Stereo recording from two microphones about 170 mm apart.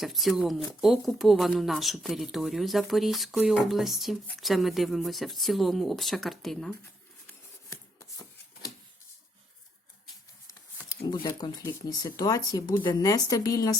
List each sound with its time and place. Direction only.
0.0 s speech: centre (ahead or behind)
7.7 s chopping: 20° left (ahead or behind)
10.4 s speech: 20° left (ahead or behind)